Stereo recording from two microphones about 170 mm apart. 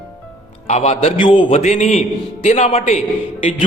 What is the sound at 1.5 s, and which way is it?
A man's voice, 45° left (ahead or behind).